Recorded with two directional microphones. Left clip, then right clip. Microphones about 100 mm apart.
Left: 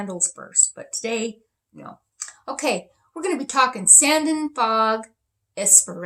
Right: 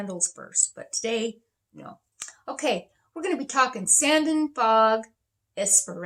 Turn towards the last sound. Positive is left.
turn(degrees=-5)  # may be behind; listen again after turning